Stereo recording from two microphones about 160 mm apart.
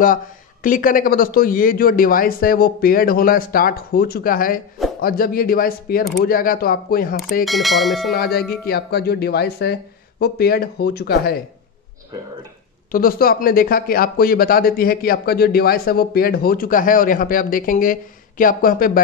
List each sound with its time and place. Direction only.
0.0 s speech: 60° left (ahead or behind)
7.4 s speech: centre (ahead or behind)
8.1 s speech: 75° left (ahead or behind)
12.9 s speech: 65° left (ahead or behind)